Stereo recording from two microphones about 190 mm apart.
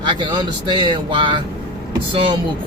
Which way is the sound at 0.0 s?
25° right (ahead or behind).